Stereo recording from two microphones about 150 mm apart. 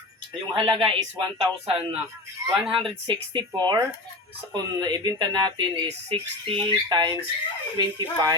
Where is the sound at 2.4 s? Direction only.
25° right (ahead or behind).